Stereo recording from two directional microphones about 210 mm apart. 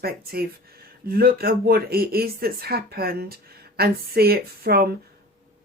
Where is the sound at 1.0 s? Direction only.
45° right (ahead or behind).